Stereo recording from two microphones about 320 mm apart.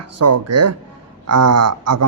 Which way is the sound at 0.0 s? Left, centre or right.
Right.